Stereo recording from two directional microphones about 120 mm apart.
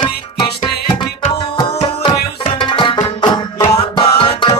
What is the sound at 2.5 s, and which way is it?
Music, 45° left (ahead or behind).